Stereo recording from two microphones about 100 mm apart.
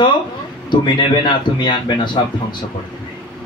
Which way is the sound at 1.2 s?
50° left (ahead or behind).